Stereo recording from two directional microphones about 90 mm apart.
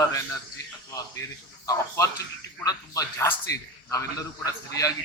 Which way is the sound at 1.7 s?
35° left (ahead or behind).